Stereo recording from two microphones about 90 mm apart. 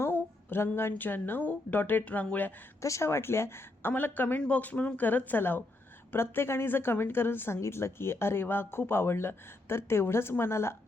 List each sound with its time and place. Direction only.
0.0 s a woman's voice: 25° left (ahead or behind)
2.8 s a woman's voice: 35° left (ahead or behind)